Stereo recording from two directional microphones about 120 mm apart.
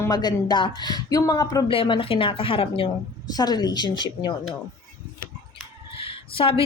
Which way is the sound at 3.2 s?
35° left (ahead or behind).